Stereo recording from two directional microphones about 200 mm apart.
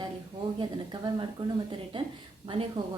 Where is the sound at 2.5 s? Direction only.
30° right (ahead or behind).